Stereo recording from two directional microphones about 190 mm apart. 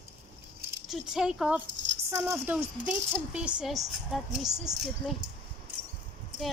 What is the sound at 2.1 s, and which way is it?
A woman's voice, 15° right (ahead or behind).